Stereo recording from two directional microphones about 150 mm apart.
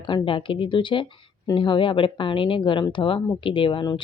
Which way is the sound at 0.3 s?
35° left (ahead or behind).